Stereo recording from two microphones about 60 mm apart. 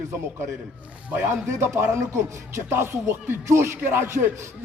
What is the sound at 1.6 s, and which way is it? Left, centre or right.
Speech, right.